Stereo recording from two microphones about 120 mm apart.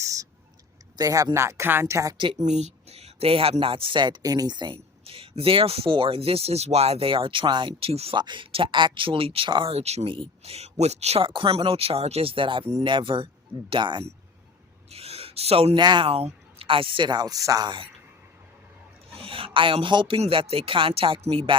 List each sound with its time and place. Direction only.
0.0 s a sound: 30° right (ahead or behind)
0.9 s speech: 30° right (ahead or behind)
2.4 s speech: 70° right (ahead or behind); by 8.1 s 55° right (ahead or behind)
8.1 s speech: 40° right (ahead or behind)
9.7 s speech: 60° right (ahead or behind)
11.2 s speech: 45° right (ahead or behind)
14.8 s a sound: 55° right (ahead or behind)
15.8 s speech: 40° right (ahead or behind)
19.1 s a sound: 50° right (ahead or behind)
19.5 s speech: 45° right (ahead or behind)